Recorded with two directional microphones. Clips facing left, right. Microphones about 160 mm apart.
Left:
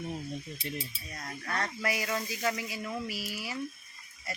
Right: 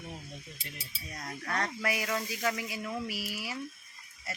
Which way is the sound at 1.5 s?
10° right (ahead or behind).